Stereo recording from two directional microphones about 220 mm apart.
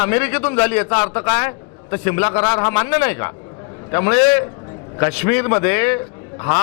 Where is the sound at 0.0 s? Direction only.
15° left (ahead or behind).